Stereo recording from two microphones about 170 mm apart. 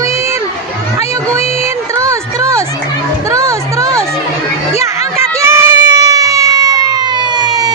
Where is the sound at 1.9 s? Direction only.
20° right (ahead or behind).